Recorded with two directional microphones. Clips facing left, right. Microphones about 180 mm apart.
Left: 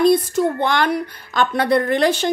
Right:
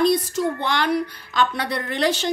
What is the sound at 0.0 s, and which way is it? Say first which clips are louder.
Speech: left 4 dB; 55° left (ahead or behind).